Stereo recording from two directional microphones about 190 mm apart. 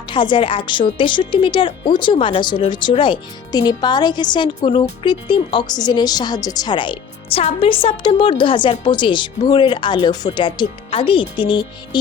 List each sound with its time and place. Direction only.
0.1 s speech: 25° left (ahead or behind)